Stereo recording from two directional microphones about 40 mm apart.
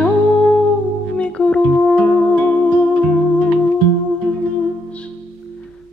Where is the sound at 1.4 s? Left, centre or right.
Left.